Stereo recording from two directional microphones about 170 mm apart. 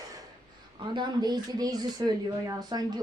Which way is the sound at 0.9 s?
25° right (ahead or behind).